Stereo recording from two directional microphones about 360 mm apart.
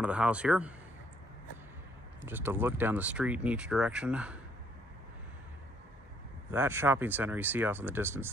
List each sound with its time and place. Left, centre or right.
0.0 s speech: centre
2.2 s speech: centre
6.5 s speech: centre